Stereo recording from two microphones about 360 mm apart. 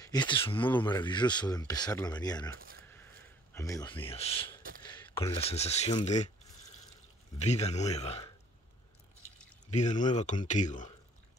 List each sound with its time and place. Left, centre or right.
0.0 s speech: centre
2.5 s speech: right
3.5 s speech: centre
7.3 s speech: centre
9.7 s speech: centre